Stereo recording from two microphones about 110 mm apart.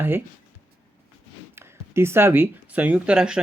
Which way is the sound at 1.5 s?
25° right (ahead or behind).